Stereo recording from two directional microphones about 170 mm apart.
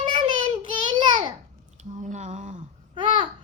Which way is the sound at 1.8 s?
45° right (ahead or behind).